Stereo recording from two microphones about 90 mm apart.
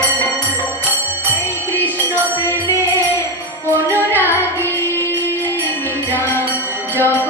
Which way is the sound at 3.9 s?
20° right (ahead or behind).